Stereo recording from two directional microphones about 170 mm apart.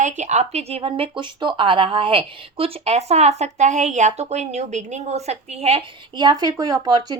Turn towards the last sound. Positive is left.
turn(degrees=-25)  # may be behind; listen again after turning